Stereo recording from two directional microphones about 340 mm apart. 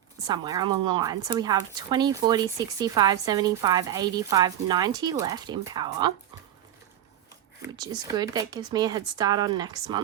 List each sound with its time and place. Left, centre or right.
0.3 s a woman's voice: centre
7.6 s a woman's voice: centre